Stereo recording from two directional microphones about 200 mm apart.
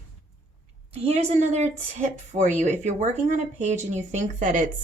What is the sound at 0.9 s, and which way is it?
Speech, 30° right (ahead or behind).